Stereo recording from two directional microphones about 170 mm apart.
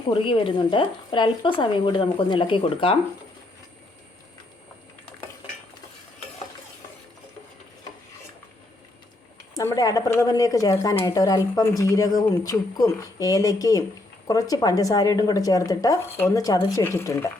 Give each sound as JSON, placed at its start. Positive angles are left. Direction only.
{"t": 0.1, "sound": "speech", "side_deg": 30}
{"t": 9.6, "sound": "speech", "side_deg": 20}